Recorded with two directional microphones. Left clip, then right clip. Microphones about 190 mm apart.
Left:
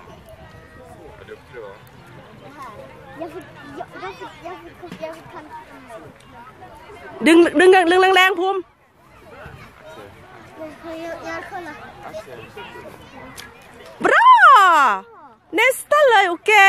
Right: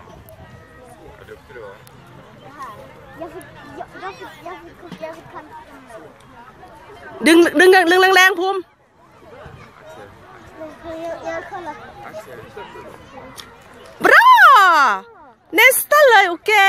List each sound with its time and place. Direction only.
3.2 s speech: 50° left (ahead or behind)
7.2 s speech: centre (ahead or behind)
10.6 s speech: 50° left (ahead or behind)
14.0 s a sound: 5° right (ahead or behind)
15.5 s speech: 5° right (ahead or behind)